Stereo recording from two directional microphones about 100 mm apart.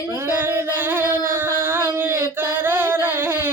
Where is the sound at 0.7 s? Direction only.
20° right (ahead or behind).